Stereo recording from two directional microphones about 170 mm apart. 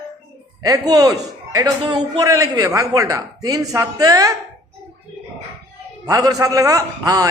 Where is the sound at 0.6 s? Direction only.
20° right (ahead or behind).